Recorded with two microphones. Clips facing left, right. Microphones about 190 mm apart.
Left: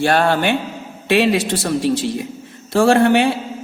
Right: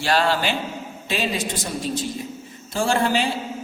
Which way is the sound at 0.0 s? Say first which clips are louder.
Left 5 dB; 55° left (ahead or behind).